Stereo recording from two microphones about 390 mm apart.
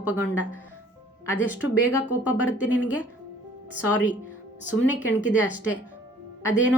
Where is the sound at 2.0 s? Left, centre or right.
Centre.